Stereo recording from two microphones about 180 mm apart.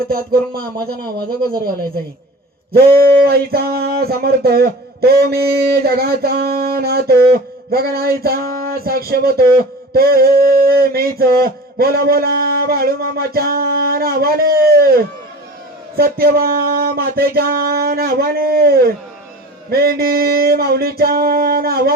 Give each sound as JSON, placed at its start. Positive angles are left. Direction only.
{"t": 0.1, "sound": "speech", "side_deg": -55}
{"t": 2.7, "sound": "speech", "side_deg": -60}